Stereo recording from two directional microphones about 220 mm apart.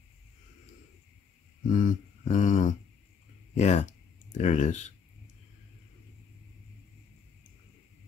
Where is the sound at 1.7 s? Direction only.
35° left (ahead or behind).